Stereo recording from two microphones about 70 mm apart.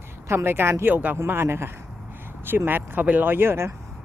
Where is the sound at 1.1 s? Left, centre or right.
Right.